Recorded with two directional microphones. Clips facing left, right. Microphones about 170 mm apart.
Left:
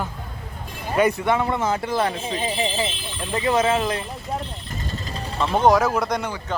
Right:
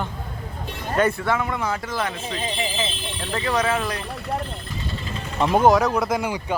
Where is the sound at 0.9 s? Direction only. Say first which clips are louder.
Left 2 dB; 15° left (ahead or behind).